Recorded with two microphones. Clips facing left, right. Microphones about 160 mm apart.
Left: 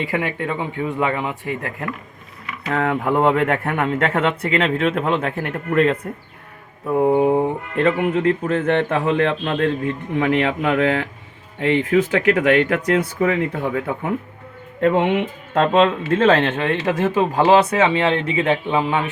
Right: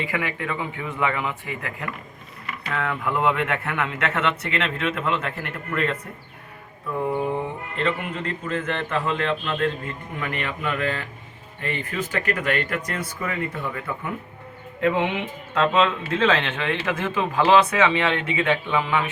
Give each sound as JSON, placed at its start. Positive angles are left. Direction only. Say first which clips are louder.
{"t": 0.1, "sound": "speech", "louder": "left 5 dB", "side_deg": 30}
{"t": 14.8, "sound": "speech", "louder": "left 6 dB", "side_deg": 45}